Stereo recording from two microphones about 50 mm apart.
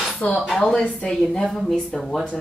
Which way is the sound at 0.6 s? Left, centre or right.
Centre.